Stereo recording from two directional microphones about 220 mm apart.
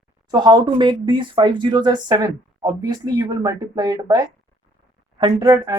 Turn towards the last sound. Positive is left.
turn(degrees=-20)  # may be behind; listen again after turning